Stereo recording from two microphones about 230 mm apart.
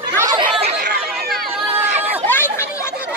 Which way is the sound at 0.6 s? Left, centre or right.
Right.